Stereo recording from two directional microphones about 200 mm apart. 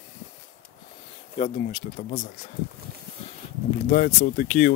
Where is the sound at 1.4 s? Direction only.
40° left (ahead or behind).